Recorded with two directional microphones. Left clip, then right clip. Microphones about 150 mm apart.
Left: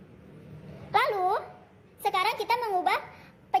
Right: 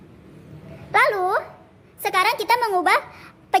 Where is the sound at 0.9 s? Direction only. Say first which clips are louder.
Right 7 dB; 20° right (ahead or behind).